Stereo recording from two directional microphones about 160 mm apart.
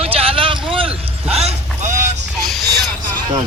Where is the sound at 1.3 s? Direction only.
45° right (ahead or behind).